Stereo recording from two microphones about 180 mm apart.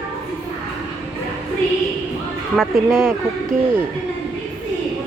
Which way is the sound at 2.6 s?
Centre (ahead or behind).